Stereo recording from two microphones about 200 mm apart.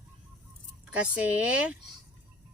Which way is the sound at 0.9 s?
5° right (ahead or behind).